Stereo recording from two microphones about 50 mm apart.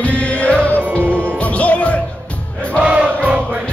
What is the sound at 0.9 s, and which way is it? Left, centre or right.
Music, right.